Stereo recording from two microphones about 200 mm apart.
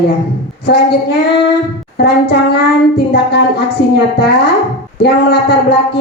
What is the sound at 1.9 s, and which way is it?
A woman's voice, 55° left (ahead or behind).